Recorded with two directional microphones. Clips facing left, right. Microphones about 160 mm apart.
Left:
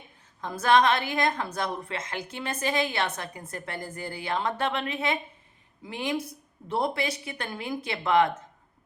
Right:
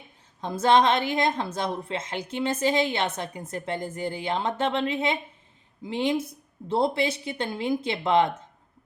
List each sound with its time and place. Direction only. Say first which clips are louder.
0.4 s a woman's voice: right 2 dB; 25° right (ahead or behind)